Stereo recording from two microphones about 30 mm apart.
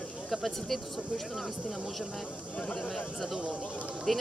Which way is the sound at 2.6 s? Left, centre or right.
Left.